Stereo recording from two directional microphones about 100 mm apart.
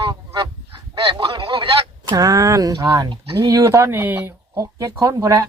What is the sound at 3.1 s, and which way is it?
Speech, 55° right (ahead or behind).